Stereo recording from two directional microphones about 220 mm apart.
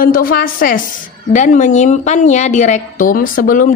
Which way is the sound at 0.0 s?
40° left (ahead or behind).